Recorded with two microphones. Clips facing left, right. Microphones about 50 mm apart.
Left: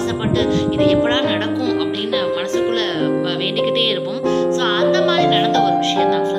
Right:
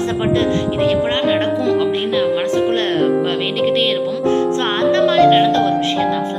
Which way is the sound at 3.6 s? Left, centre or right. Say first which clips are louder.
Right 2 dB; centre.